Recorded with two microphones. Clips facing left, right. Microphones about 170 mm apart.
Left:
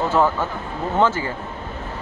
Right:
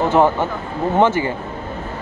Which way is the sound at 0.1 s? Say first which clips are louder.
Right 4 dB; 20° right (ahead or behind).